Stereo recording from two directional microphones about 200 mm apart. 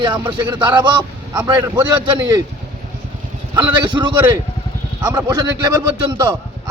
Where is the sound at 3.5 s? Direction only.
20° right (ahead or behind).